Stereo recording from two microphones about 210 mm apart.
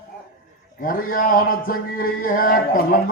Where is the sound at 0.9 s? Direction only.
40° left (ahead or behind).